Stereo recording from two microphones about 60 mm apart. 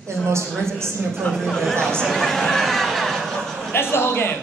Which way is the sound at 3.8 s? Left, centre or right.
Left.